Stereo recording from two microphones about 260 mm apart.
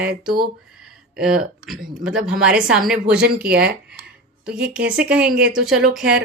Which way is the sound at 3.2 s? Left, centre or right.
Right.